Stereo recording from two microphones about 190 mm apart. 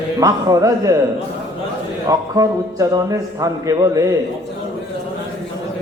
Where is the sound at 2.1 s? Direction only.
20° right (ahead or behind).